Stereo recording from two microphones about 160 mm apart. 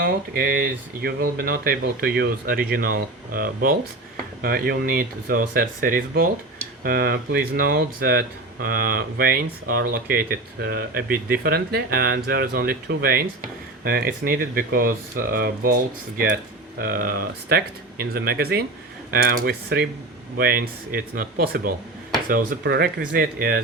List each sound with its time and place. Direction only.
0.0 s speech: 70° right (ahead or behind)
22.3 s speech: 75° right (ahead or behind)